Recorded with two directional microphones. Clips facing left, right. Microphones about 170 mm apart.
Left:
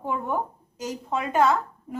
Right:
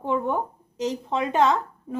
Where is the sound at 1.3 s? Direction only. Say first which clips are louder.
Even; 20° right (ahead or behind).